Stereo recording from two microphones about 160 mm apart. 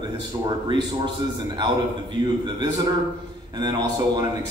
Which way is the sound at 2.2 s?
30° right (ahead or behind).